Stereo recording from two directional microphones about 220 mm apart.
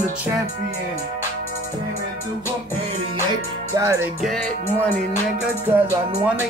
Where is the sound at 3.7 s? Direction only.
15° right (ahead or behind).